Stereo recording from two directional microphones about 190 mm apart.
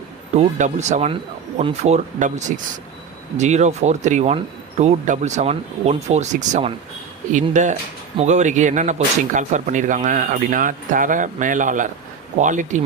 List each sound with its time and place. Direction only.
0.3 s speech: 35° right (ahead or behind)